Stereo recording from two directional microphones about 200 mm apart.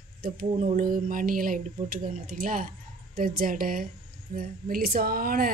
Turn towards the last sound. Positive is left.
turn(degrees=-45)  # may be behind; listen again after turning